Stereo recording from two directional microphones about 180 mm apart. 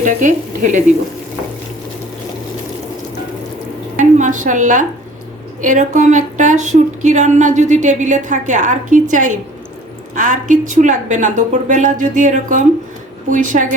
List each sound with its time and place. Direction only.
0.0 s a woman's voice: 45° right (ahead or behind)
4.2 s a woman's voice: 45° right (ahead or behind)